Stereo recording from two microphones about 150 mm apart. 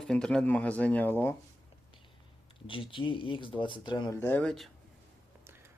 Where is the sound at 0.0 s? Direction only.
5° left (ahead or behind).